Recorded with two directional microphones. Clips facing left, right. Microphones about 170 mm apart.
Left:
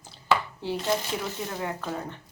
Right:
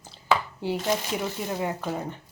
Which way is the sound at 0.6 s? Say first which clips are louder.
Right 1 dB; 15° right (ahead or behind).